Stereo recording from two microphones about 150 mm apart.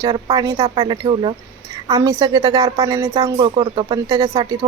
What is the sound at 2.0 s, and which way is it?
Speech, 25° right (ahead or behind).